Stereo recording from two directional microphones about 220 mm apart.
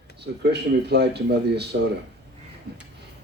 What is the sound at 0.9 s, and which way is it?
Speech, 50° right (ahead or behind).